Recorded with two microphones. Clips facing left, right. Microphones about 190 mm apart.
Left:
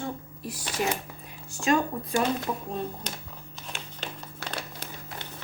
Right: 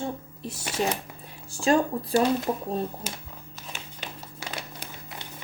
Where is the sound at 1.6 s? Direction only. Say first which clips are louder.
Right 3 dB; 35° right (ahead or behind).